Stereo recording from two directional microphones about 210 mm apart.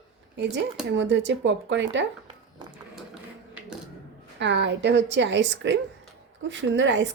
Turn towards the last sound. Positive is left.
turn(degrees=-60)  # may be behind; listen again after turning